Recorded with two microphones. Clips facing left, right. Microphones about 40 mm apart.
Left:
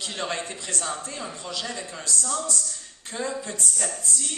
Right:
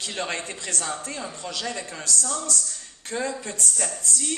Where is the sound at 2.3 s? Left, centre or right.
Left.